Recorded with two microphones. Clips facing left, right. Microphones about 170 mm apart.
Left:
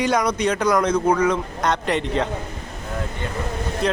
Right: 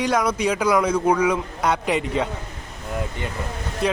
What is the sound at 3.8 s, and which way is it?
Speech, 5° right (ahead or behind).